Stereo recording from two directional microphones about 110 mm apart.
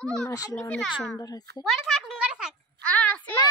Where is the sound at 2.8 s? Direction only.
10° left (ahead or behind).